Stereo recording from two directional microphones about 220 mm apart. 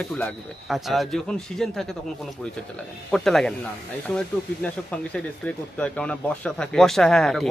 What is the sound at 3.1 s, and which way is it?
Speech, centre (ahead or behind).